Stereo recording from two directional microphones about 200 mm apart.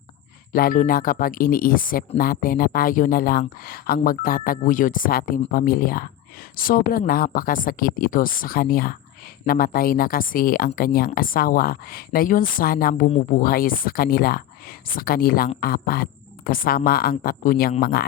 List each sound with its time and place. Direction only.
0.5 s speech: 45° left (ahead or behind)
13.1 s speech: 30° left (ahead or behind)
13.4 s speech: 45° left (ahead or behind)